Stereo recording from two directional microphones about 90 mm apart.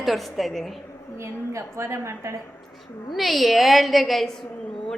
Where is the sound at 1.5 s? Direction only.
30° right (ahead or behind).